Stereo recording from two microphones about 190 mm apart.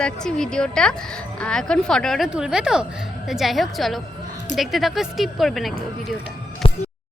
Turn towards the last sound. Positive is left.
turn(degrees=30)  # may be behind; listen again after turning